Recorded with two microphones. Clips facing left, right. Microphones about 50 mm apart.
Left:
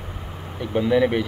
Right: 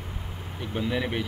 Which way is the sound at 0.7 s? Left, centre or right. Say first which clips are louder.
Left 10 dB; centre.